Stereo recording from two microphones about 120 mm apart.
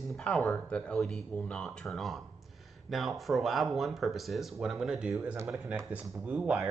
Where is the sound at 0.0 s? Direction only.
5° left (ahead or behind).